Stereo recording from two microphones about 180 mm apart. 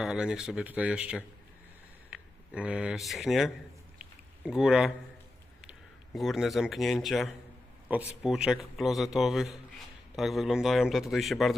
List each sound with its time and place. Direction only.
0.0 s a man's voice: 5° right (ahead or behind)
6.1 s a man's voice: centre (ahead or behind)